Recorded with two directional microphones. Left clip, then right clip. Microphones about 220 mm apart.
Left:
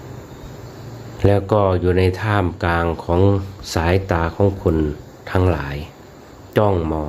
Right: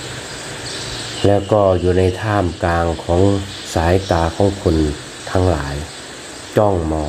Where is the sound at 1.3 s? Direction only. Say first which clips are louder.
Right 3 dB; 15° left (ahead or behind).